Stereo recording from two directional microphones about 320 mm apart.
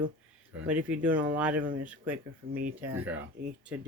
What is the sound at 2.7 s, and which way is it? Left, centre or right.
Speech, centre.